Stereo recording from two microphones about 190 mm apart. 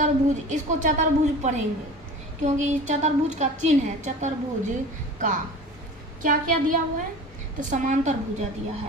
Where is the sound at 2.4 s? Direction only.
40° right (ahead or behind).